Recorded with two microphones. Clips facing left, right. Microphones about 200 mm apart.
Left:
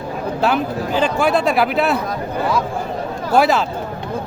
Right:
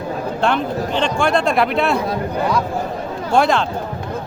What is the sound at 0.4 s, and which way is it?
Speech, 5° left (ahead or behind).